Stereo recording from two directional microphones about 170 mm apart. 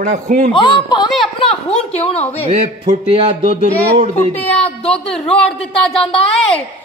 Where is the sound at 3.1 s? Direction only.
35° right (ahead or behind).